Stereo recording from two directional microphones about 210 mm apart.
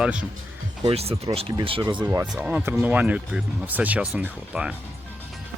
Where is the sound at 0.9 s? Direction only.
30° right (ahead or behind).